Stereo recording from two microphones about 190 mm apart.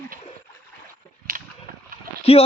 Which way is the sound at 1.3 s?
50° right (ahead or behind).